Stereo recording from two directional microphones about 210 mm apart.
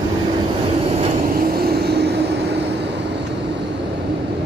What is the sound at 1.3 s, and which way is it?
Vehicle, 45° right (ahead or behind).